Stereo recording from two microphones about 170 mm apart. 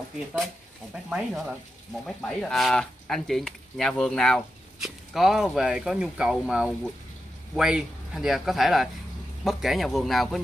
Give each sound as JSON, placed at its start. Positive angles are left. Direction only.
{"t": 1.1, "sound": "speech", "side_deg": 0}